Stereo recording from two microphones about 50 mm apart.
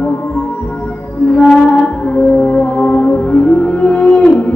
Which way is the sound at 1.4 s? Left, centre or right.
Centre.